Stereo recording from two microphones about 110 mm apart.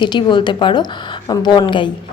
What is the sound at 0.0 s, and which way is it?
A woman's voice, 45° left (ahead or behind).